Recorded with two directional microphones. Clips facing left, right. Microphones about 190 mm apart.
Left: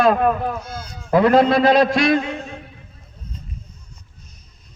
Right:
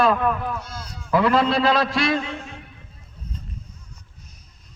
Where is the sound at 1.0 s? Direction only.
55° left (ahead or behind).